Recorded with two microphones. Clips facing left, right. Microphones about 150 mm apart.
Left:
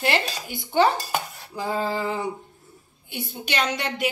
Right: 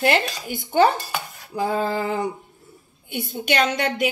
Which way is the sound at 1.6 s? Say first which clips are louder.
Right 3 dB; 55° right (ahead or behind).